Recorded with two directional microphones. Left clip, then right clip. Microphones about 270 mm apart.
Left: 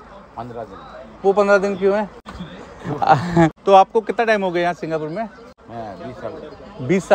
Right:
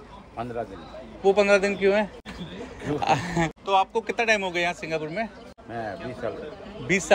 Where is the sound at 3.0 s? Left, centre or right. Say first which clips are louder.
Left 10 dB; centre.